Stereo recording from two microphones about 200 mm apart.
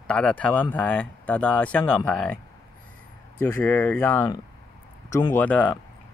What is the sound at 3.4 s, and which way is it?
Speech, 10° left (ahead or behind).